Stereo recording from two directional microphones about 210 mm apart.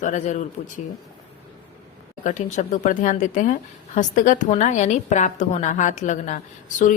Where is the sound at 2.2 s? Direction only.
35° left (ahead or behind).